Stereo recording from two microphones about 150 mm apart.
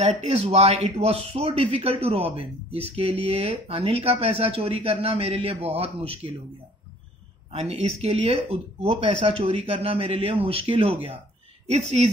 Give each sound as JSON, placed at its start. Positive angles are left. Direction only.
{"t": 0.2, "sound": "speech", "side_deg": -45}
{"t": 7.5, "sound": "a woman's voice", "side_deg": -45}